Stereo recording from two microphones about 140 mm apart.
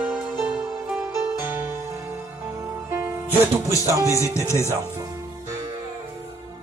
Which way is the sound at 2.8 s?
15° right (ahead or behind).